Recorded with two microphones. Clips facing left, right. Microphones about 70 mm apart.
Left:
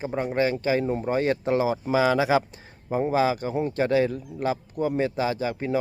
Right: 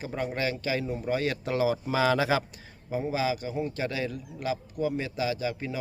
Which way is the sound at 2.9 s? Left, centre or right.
Left.